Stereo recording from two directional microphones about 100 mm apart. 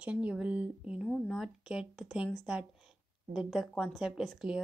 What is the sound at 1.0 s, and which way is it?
Speech, 5° left (ahead or behind).